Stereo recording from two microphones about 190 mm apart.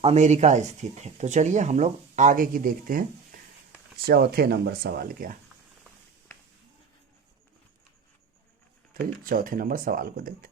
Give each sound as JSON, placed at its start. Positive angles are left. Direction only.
{"t": 0.0, "sound": "speech", "side_deg": -35}
{"t": 9.2, "sound": "speech", "side_deg": -50}